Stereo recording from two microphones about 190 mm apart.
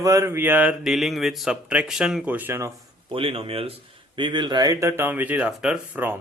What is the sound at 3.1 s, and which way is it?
Speech, 30° right (ahead or behind).